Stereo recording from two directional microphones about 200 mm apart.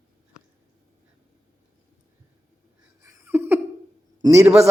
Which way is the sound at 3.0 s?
10° right (ahead or behind).